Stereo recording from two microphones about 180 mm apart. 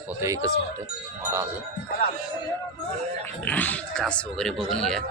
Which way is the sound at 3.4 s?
10° left (ahead or behind).